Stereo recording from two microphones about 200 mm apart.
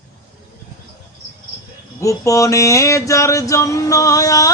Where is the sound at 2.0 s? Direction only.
15° left (ahead or behind).